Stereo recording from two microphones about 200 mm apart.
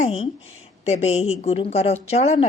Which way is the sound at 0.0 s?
30° left (ahead or behind).